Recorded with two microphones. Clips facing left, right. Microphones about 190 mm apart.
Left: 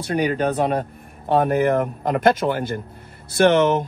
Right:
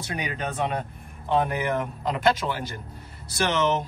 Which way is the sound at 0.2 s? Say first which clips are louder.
Left 9 dB; 35° left (ahead or behind).